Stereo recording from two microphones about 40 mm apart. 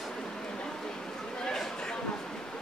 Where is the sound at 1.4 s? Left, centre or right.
Centre.